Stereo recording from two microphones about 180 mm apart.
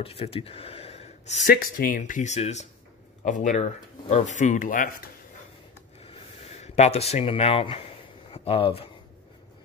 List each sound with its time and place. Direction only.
0.0 s speech: 35° left (ahead or behind)
1.5 s speech: 55° left (ahead or behind)
6.0 s a sound: 35° left (ahead or behind)
8.3 s speech: 30° left (ahead or behind)